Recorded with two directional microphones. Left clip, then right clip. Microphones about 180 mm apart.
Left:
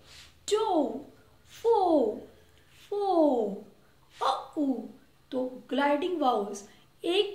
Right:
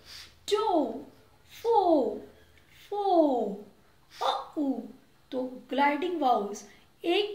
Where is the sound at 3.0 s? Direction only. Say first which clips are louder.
Right 1 dB; 20° left (ahead or behind).